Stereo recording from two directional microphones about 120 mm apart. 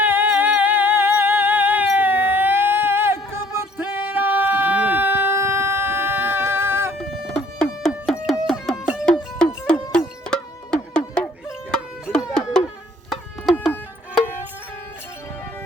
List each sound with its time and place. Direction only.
0.0 s music: 15° right (ahead or behind)
3.8 s a sound: 15° right (ahead or behind)
7.0 s music: 5° right (ahead or behind)